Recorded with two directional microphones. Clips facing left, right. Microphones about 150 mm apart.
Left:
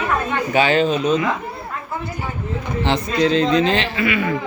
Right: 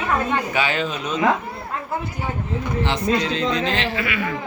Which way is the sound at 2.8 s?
25° left (ahead or behind).